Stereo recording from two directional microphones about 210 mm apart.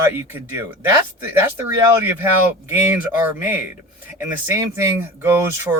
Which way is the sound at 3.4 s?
10° right (ahead or behind).